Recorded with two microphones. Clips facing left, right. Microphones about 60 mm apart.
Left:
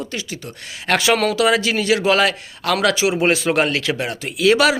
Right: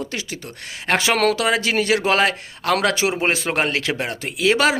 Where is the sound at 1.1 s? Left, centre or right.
Right.